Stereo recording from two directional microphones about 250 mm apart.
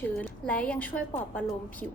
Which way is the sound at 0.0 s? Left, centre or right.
Centre.